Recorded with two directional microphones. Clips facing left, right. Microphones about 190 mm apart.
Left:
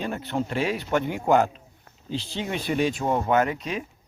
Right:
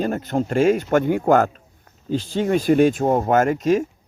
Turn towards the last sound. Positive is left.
turn(degrees=-45)  # may be behind; listen again after turning